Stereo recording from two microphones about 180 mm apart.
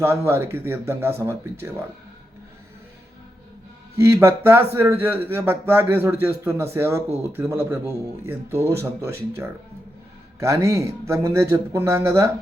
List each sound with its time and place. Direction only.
0.0 s a man's voice: 15° right (ahead or behind)
3.9 s a man's voice: 15° right (ahead or behind)